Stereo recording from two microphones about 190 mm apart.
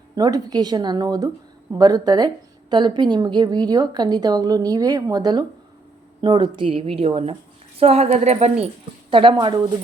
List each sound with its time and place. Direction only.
0.2 s speech: 20° right (ahead or behind)